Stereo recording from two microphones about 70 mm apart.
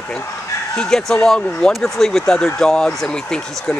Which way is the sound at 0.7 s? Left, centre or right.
Centre.